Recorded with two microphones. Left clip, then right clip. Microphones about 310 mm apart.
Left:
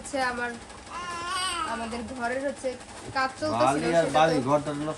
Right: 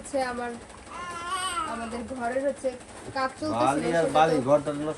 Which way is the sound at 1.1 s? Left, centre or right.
Centre.